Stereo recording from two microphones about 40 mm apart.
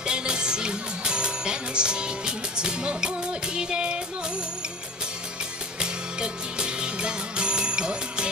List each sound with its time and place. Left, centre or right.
0.0 s music: right
5.8 s music: right